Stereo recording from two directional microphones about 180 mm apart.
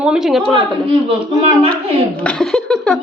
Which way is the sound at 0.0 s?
5° right (ahead or behind).